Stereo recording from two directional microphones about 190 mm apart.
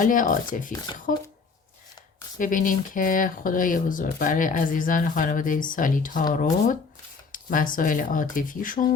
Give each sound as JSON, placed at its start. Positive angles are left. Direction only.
{"t": 0.0, "sound": "speech", "side_deg": 45}
{"t": 2.4, "sound": "speech", "side_deg": 45}